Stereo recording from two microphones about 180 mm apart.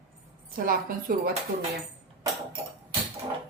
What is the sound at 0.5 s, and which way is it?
Speech, 50° right (ahead or behind).